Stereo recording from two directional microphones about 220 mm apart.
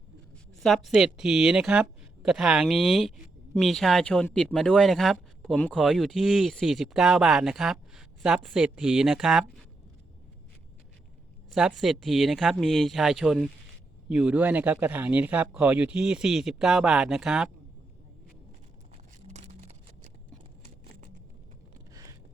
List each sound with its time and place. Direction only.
0.6 s speech: centre (ahead or behind)
11.5 s speech: centre (ahead or behind)
19.3 s a sound: 30° right (ahead or behind)